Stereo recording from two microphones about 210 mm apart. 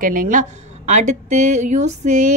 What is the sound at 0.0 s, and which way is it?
A woman's voice, 40° right (ahead or behind).